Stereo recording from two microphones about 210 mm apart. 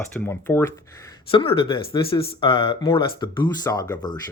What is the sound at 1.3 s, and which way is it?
Speech, 25° left (ahead or behind).